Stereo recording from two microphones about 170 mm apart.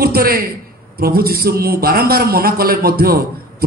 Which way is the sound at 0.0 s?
60° right (ahead or behind).